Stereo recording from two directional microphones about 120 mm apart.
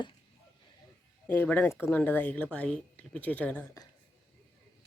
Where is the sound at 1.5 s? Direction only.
10° left (ahead or behind).